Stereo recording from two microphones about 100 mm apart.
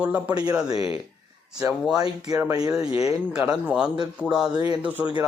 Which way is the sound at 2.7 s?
10° right (ahead or behind).